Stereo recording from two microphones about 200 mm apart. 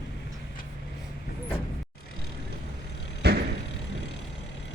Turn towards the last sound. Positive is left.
turn(degrees=-55)  # may be behind; listen again after turning